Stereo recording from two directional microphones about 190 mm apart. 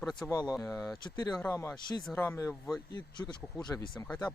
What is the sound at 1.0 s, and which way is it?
Speech, 20° left (ahead or behind).